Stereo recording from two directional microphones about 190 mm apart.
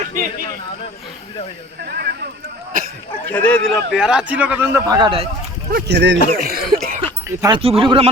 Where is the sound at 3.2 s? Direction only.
10° left (ahead or behind); by 5.3 s 25° right (ahead or behind).